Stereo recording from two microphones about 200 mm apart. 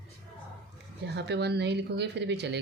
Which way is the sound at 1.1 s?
55° right (ahead or behind).